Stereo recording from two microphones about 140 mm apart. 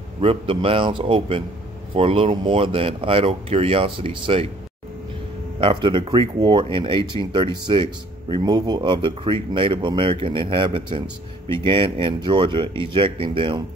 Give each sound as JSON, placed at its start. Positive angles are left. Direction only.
{"t": 0.2, "sound": "speech", "side_deg": -40}
{"t": 5.6, "sound": "speech", "side_deg": -35}